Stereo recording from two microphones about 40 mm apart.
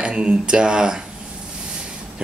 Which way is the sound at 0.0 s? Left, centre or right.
Right.